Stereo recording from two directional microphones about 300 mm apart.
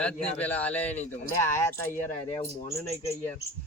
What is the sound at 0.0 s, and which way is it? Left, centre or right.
Speech, centre.